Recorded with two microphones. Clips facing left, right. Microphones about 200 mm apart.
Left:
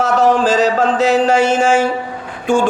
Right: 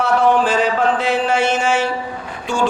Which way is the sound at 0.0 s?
40° left (ahead or behind).